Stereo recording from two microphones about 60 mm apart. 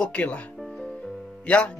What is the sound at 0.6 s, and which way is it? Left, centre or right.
Music, centre.